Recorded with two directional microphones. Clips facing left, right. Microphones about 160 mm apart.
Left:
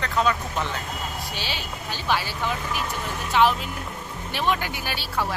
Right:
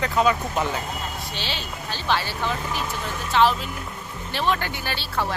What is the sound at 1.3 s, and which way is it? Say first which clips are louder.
Speech: right 1 dB; 10° left (ahead or behind).